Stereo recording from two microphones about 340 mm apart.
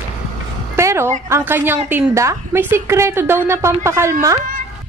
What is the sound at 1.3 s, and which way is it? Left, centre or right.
A woman's voice, centre.